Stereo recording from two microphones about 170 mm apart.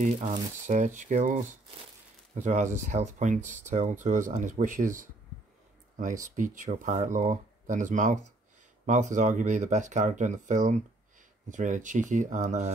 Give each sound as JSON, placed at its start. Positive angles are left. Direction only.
{"t": 0.0, "sound": "speech", "side_deg": -45}
{"t": 2.4, "sound": "speech", "side_deg": -45}
{"t": 6.3, "sound": "speech", "side_deg": -50}